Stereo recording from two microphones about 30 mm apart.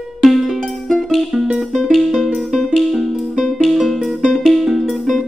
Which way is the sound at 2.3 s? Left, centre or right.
Centre.